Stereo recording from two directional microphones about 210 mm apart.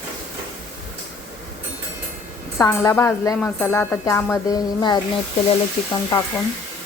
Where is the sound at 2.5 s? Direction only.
15° left (ahead or behind).